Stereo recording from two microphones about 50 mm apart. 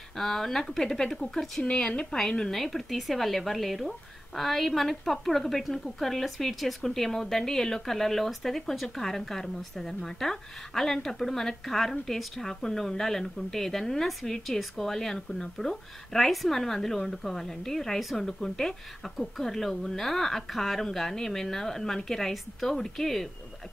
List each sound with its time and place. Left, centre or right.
0.2 s a woman's voice: centre